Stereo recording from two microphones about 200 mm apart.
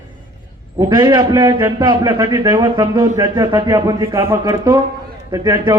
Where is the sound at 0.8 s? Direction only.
20° right (ahead or behind).